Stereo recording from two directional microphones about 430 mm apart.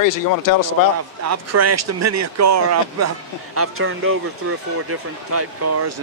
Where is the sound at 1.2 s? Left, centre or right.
Right.